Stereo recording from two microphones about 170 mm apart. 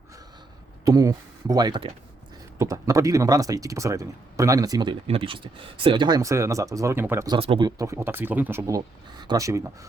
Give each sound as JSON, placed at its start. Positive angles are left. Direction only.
{"t": 0.9, "sound": "speech", "side_deg": -20}
{"t": 7.3, "sound": "speech", "side_deg": -30}
{"t": 7.8, "sound": "speech", "side_deg": -15}